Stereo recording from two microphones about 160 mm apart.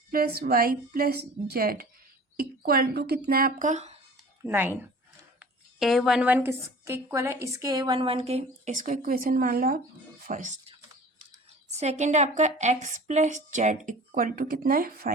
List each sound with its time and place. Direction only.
0.1 s a woman's voice: 75° right (ahead or behind); by 3.9 s 45° right (ahead or behind)
4.4 s speech: 15° right (ahead or behind)
5.4 s a woman's voice: centre (ahead or behind); by 9.8 s 65° right (ahead or behind)
10.2 s speech: 50° right (ahead or behind)
11.8 s a woman's voice: 45° right (ahead or behind); by 15.1 s 70° right (ahead or behind)